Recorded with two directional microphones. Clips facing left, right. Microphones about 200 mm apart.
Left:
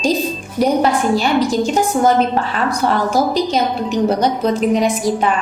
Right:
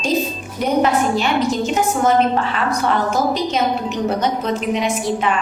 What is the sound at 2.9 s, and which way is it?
A woman's voice, 35° left (ahead or behind).